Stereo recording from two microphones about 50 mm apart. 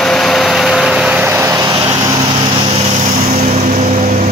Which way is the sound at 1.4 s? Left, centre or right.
Right.